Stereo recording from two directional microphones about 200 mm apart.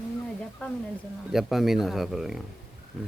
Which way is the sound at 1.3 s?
Centre (ahead or behind).